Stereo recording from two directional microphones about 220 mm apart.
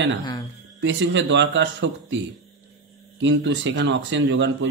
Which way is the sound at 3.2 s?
55° right (ahead or behind).